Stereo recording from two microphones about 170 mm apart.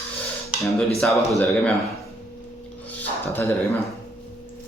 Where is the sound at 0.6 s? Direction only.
Centre (ahead or behind).